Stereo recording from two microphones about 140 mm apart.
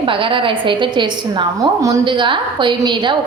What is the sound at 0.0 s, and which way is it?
A woman's voice, 40° right (ahead or behind).